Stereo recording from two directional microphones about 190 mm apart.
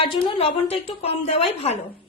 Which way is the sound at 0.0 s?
25° left (ahead or behind).